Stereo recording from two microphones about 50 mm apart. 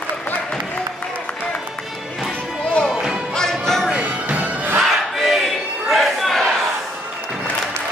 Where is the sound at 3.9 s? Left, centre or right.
Right.